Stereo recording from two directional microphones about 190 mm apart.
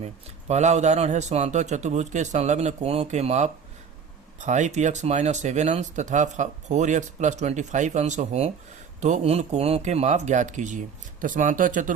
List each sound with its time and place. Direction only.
0.0 s speech: 35° right (ahead or behind)